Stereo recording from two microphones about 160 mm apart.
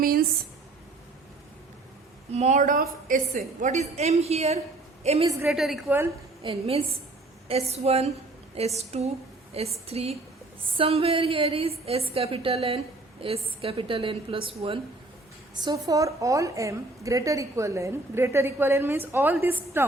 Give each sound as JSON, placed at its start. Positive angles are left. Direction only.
{"t": 0.0, "sound": "a sound", "side_deg": -65}
{"t": 2.3, "sound": "a woman's voice", "side_deg": -45}
{"t": 3.6, "sound": "a woman's voice", "side_deg": -45}
{"t": 5.5, "sound": "a woman's voice", "side_deg": 0}
{"t": 6.4, "sound": "a woman's voice", "side_deg": -35}
{"t": 15.6, "sound": "a woman's voice", "side_deg": -20}